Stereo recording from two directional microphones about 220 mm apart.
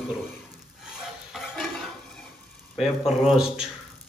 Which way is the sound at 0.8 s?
Centre (ahead or behind).